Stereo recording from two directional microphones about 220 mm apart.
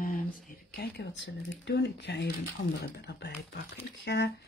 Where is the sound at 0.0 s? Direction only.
40° left (ahead or behind).